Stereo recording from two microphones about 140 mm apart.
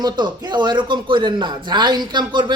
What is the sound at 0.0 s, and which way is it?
A man's voice, 30° right (ahead or behind).